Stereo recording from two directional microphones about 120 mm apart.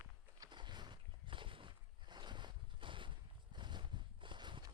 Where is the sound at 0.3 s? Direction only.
35° right (ahead or behind).